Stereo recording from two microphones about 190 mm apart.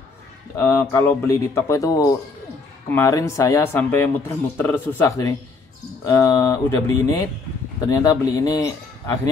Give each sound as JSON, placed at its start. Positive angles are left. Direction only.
{"t": 0.6, "sound": "speech", "side_deg": 15}